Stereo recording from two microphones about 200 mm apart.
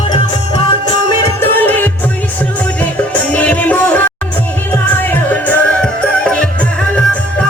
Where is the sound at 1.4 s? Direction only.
10° left (ahead or behind).